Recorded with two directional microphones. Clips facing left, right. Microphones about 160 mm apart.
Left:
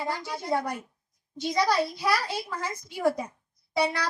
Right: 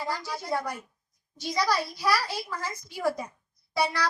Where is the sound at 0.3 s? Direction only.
25° left (ahead or behind).